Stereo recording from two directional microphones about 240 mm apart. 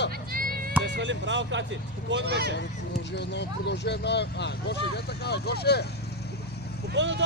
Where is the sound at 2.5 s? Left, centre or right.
Left.